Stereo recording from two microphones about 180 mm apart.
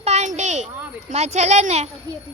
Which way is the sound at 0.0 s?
35° right (ahead or behind).